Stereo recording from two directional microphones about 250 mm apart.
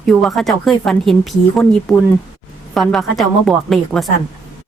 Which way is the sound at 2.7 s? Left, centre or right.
Centre.